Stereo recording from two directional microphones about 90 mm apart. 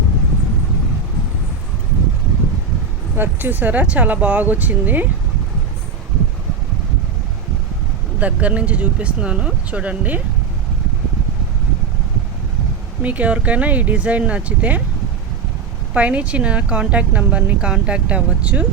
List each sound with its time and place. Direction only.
3.2 s speech: 20° right (ahead or behind)
8.2 s speech: 15° right (ahead or behind)
13.0 s speech: 15° right (ahead or behind)
16.0 s speech: 15° right (ahead or behind)